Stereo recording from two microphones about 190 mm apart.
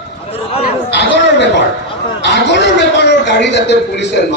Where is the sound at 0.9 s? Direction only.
65° left (ahead or behind).